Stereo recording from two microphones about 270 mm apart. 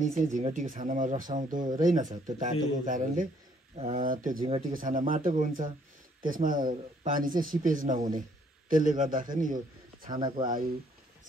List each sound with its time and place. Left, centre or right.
0.0 s speech: right
10.0 s speech: centre